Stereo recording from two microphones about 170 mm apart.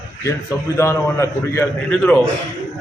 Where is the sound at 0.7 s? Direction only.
15° left (ahead or behind).